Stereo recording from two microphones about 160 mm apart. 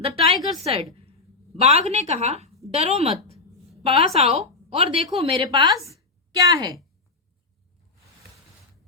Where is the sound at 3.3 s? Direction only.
40° right (ahead or behind).